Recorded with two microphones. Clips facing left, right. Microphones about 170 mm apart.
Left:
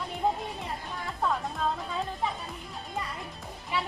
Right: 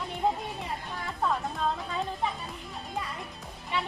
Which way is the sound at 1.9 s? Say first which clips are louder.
Even; centre (ahead or behind).